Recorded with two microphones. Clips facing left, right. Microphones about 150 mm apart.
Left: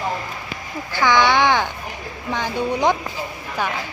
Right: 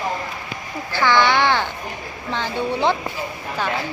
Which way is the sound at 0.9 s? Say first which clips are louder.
Even; 15° left (ahead or behind).